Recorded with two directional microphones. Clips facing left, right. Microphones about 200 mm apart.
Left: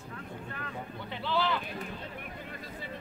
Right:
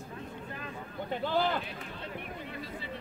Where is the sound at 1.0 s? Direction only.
45° right (ahead or behind).